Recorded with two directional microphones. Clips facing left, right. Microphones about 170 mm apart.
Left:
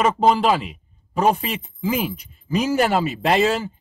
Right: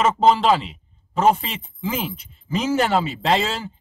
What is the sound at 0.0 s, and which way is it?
Speech, 10° left (ahead or behind).